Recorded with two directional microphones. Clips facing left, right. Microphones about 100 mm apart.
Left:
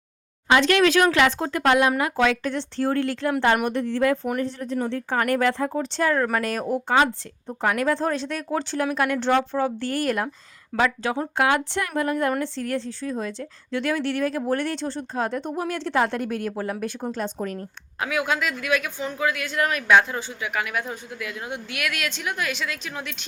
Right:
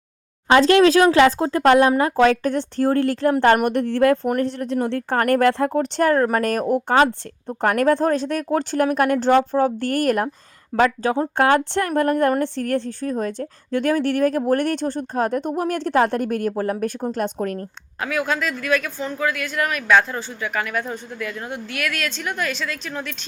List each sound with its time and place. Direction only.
0.4 s a woman's voice: 35° right (ahead or behind); by 6.1 s 55° right (ahead or behind)
6.1 s a woman's voice: 40° right (ahead or behind)
17.2 s a woman's voice: 60° right (ahead or behind)
18.0 s speech: 15° left (ahead or behind)
20.0 s speech: 15° left (ahead or behind)